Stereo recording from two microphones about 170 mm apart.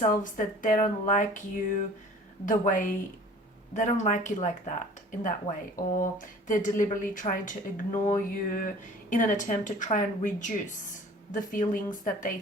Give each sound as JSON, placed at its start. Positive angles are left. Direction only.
{"t": 0.0, "sound": "speech", "side_deg": 50}